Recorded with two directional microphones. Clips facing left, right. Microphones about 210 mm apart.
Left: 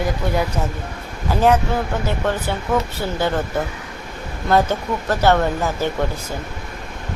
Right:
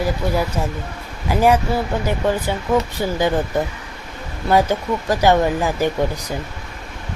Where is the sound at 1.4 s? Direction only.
10° right (ahead or behind).